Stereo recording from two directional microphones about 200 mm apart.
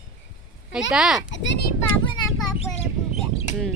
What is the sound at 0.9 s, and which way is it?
Speech, centre (ahead or behind).